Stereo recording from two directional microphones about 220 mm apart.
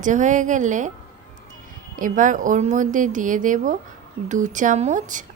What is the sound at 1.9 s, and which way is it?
A woman's voice, 35° right (ahead or behind).